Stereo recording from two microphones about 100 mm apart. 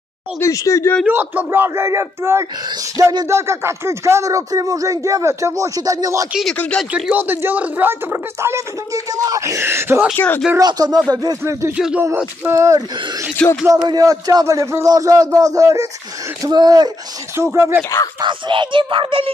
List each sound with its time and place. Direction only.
0.4 s speech: 30° left (ahead or behind)
1.0 s speech: 20° right (ahead or behind)
3.0 s speech: 40° right (ahead or behind)
3.3 s speech: 30° right (ahead or behind)
7.1 s speech: 20° right (ahead or behind)
10.1 s speech: 20° left (ahead or behind)
10.6 s speech: 40° right (ahead or behind)
11.7 s speech: 10° right (ahead or behind)
12.4 s speech: 30° right (ahead or behind)
13.4 s speech: 10° left (ahead or behind)
13.8 s speech: 40° right (ahead or behind)
16.4 s speech: 45° right (ahead or behind)
17.4 s speech: 25° right (ahead or behind)
18.2 s speech: 55° right (ahead or behind)